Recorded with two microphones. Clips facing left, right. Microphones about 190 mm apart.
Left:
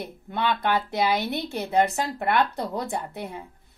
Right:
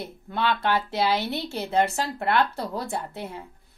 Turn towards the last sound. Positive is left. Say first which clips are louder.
# left 1 dB
turn(degrees=15)  # may be behind; listen again after turning